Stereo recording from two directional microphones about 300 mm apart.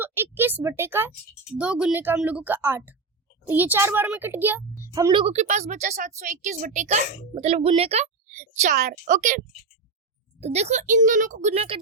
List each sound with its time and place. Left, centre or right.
0.0 s a sound: centre
1.5 s a woman's voice: centre; by 9.4 s right
10.4 s a woman's voice: right